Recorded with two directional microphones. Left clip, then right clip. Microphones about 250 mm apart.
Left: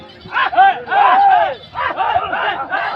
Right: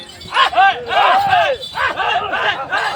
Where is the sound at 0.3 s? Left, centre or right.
Right.